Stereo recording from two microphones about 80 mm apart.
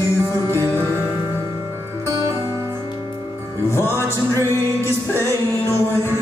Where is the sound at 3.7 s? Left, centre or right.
Left.